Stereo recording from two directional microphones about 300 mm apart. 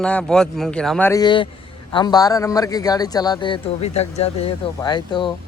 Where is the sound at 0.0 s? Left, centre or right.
Centre.